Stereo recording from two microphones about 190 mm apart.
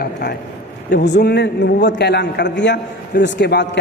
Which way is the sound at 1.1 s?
60° left (ahead or behind).